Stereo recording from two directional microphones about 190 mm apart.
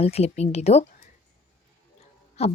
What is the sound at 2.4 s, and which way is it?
Speech, 35° left (ahead or behind).